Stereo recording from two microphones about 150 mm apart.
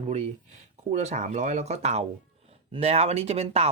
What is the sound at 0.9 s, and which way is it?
Speech, 50° right (ahead or behind).